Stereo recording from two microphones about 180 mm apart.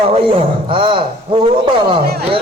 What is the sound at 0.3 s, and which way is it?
Speech, 30° right (ahead or behind).